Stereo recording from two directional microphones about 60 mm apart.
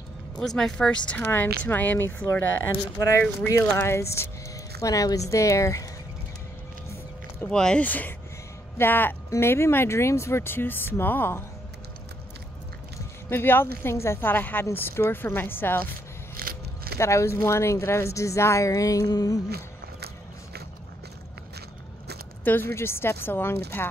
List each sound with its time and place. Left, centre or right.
0.6 s speech: centre
0.8 s speech: left
1.2 s speech: left
3.0 s a woman's voice: left
4.8 s a woman's voice: left
7.4 s speech: centre
7.8 s speech: left
9.3 s speech: left
13.3 s a woman's voice: left
14.2 s speech: left
17.0 s a woman's voice: left
18.7 s a woman's voice: left
22.4 s speech: left
22.7 s a woman's voice: left